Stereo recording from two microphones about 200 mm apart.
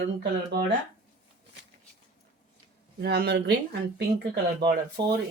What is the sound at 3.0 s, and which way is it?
Speech, 55° right (ahead or behind).